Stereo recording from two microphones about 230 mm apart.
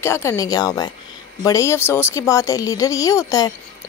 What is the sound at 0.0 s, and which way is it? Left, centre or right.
Speech, centre.